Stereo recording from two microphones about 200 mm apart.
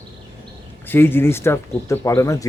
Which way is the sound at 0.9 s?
10° left (ahead or behind).